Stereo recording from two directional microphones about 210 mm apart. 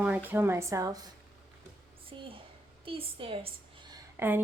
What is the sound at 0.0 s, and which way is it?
Speech, 10° right (ahead or behind).